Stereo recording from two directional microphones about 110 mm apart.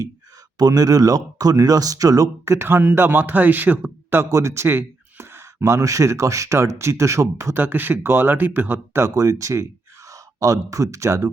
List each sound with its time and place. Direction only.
0.6 s speech: 35° right (ahead or behind)